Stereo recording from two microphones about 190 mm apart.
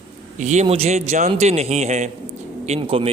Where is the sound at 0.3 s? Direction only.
40° right (ahead or behind).